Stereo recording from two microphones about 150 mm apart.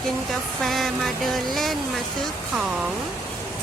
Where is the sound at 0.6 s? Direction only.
Centre (ahead or behind).